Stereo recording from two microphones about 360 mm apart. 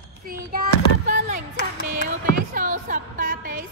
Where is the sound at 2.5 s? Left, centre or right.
Right.